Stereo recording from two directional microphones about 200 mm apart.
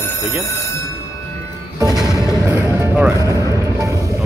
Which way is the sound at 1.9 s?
Centre (ahead or behind).